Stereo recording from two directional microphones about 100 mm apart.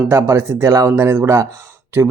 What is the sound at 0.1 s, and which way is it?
Speech, 25° right (ahead or behind).